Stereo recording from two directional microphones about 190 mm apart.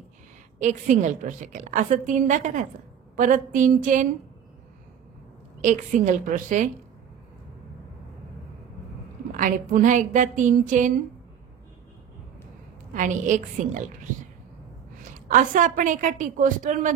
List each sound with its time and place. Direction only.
0.6 s a woman's voice: 40° right (ahead or behind)
5.6 s a woman's voice: 40° right (ahead or behind)
9.4 s a woman's voice: 45° right (ahead or behind)
12.9 s a woman's voice: 40° right (ahead or behind)
15.1 s a woman's voice: 45° right (ahead or behind)